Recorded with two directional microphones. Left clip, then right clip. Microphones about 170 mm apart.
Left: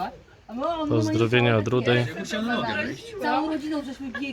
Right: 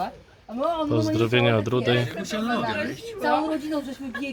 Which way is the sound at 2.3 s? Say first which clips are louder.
Right 1 dB; 55° right (ahead or behind).